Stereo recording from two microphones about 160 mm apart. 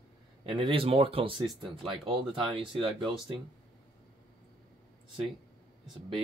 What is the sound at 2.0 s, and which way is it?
Speech, 30° right (ahead or behind).